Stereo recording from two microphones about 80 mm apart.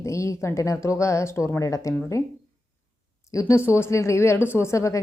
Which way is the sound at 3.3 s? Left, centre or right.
Left.